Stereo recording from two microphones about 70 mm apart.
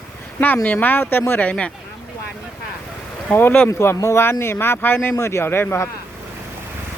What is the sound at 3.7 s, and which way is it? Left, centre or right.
Speech, left.